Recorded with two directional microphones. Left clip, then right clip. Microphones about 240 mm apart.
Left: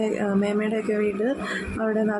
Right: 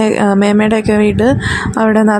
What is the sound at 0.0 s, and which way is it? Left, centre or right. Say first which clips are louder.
Speech: right 13 dB; right.